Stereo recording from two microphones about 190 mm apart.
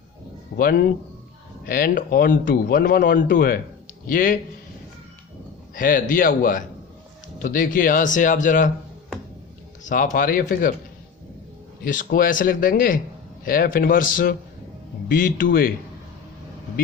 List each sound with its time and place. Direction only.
0.5 s speech: 50° left (ahead or behind)
5.7 s speech: 45° left (ahead or behind)
9.8 s speech: 40° left (ahead or behind)
11.9 s speech: 45° left (ahead or behind)